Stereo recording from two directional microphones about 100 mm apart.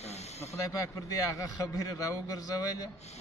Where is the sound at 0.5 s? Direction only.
30° left (ahead or behind).